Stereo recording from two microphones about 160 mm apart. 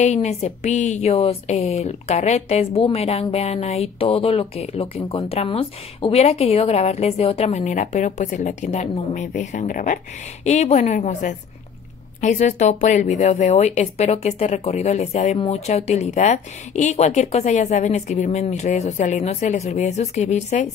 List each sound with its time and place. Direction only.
0.0 s a woman's voice: 45° left (ahead or behind)
10.4 s speech: 45° left (ahead or behind)